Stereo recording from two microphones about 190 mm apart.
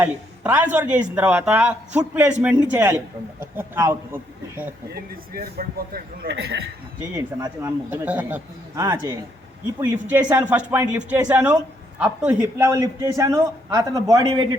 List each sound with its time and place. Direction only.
0.0 s a man's voice: 10° right (ahead or behind)
4.9 s a man's voice: 55° right (ahead or behind)
7.2 s a man's voice: 15° right (ahead or behind)